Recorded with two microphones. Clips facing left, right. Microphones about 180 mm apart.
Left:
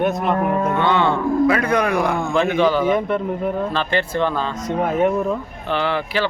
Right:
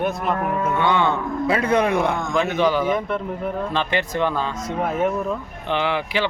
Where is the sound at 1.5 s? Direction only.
25° right (ahead or behind).